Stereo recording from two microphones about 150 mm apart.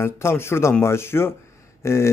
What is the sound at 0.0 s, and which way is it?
A man's voice, 15° left (ahead or behind).